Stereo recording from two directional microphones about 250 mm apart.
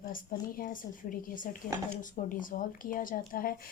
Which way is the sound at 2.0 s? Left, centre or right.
Left.